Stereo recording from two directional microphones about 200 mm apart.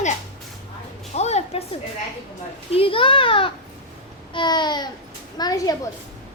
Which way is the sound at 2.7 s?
25° left (ahead or behind).